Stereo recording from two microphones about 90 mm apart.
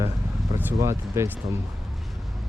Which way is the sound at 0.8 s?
30° right (ahead or behind).